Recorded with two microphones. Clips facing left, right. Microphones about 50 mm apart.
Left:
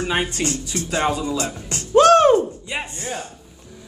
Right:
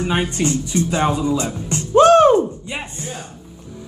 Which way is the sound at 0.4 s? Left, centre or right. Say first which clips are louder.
Right 6 dB; right.